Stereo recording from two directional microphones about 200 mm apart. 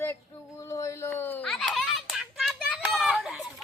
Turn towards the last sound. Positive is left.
turn(degrees=-5)  # may be behind; listen again after turning